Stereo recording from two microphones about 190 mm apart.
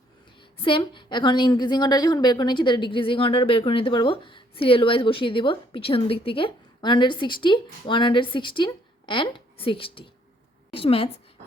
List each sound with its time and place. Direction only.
0.6 s a woman's voice: 25° left (ahead or behind)